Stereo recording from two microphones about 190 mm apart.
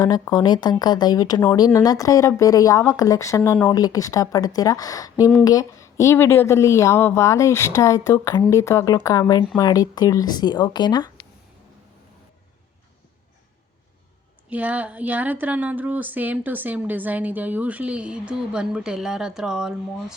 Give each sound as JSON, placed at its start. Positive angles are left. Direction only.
{"t": 0.0, "sound": "speech", "side_deg": 20}
{"t": 14.5, "sound": "a woman's voice", "side_deg": -10}